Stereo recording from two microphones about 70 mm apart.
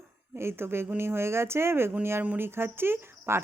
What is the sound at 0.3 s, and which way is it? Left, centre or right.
A woman's voice, right.